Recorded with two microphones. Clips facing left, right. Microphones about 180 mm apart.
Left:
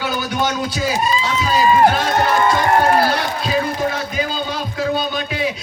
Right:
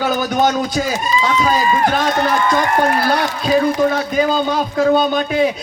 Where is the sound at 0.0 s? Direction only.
45° right (ahead or behind).